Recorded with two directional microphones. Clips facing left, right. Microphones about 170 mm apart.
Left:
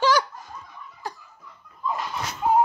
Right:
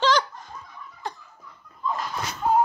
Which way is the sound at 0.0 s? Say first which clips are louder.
Left 1 dB; 5° left (ahead or behind).